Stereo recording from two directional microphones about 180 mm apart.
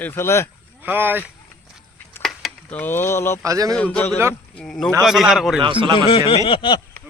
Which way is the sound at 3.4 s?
20° right (ahead or behind).